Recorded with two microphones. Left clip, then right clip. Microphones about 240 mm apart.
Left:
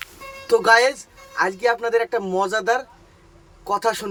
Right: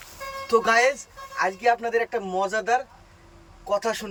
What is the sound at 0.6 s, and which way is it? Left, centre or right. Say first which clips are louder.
Speech: left 7 dB; centre.